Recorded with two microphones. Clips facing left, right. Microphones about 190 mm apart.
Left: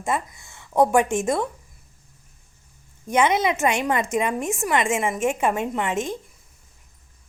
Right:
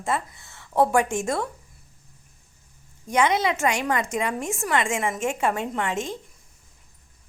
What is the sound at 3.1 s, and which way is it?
A woman's voice, 20° left (ahead or behind).